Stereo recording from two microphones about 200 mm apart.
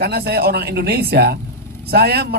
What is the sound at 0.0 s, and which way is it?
Speech, 50° right (ahead or behind).